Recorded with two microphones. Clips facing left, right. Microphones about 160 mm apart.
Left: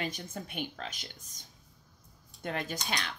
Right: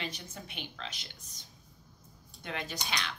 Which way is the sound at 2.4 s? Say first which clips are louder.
Left 3 dB; 45° left (ahead or behind).